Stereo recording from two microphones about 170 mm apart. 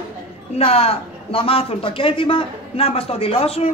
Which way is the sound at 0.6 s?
35° left (ahead or behind).